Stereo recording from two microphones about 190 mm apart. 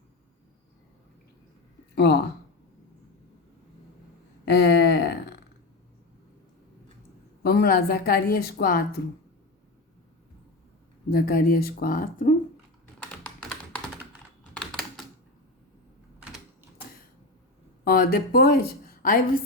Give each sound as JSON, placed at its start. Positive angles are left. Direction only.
{"t": 2.0, "sound": "speech", "side_deg": 60}
{"t": 4.4, "sound": "a sound", "side_deg": 60}
{"t": 7.4, "sound": "speech", "side_deg": 55}
{"t": 11.1, "sound": "speech", "side_deg": 50}
{"t": 14.5, "sound": "typing", "side_deg": 5}
{"t": 17.9, "sound": "speech", "side_deg": 55}